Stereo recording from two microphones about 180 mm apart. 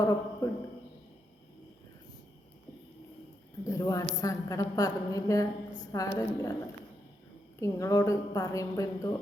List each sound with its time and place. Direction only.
0.0 s a woman's voice: 20° left (ahead or behind)
3.6 s cricket: 15° left (ahead or behind)
4.2 s a woman's voice: 20° left (ahead or behind)
7.6 s a woman's voice: 20° left (ahead or behind)